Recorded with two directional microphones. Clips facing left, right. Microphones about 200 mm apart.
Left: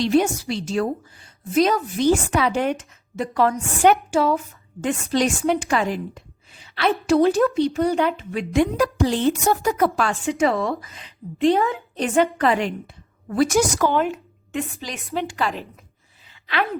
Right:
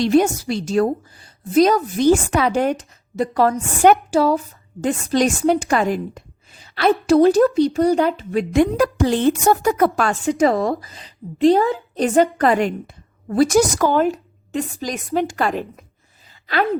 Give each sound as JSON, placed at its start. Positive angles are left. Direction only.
{"t": 0.0, "sound": "a woman's voice", "side_deg": -45}